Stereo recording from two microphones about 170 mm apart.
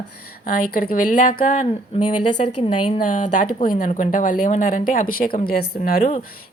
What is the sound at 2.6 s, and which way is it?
Speech, 35° left (ahead or behind).